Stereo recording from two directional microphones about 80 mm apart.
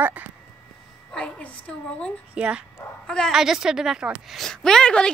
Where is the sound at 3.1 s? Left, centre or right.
Centre.